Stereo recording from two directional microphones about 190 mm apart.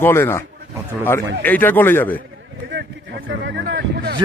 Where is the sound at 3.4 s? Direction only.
60° right (ahead or behind).